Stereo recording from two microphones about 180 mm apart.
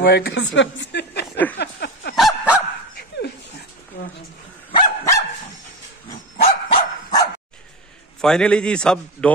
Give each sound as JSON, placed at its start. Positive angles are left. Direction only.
{"t": 0.0, "sound": "speech", "side_deg": 65}
{"t": 1.6, "sound": "a sound", "side_deg": 70}
{"t": 2.1, "sound": "dog", "side_deg": -5}
{"t": 3.9, "sound": "a sound", "side_deg": 55}
{"t": 4.7, "sound": "dog", "side_deg": 20}
{"t": 6.4, "sound": "dog", "side_deg": 25}
{"t": 8.2, "sound": "a man's voice", "side_deg": 5}